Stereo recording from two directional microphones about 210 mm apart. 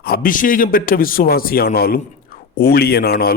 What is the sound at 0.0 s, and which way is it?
A man's voice, 45° left (ahead or behind).